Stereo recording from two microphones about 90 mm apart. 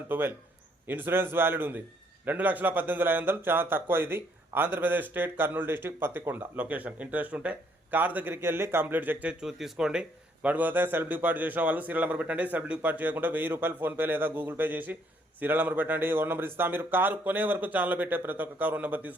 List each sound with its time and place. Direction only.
0.1 s speech: 25° right (ahead or behind)
9.4 s speech: 5° right (ahead or behind)